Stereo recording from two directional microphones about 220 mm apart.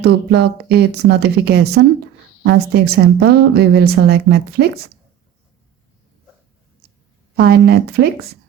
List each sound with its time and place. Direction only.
0.0 s a woman's voice: 50° right (ahead or behind)
7.3 s a woman's voice: 45° right (ahead or behind)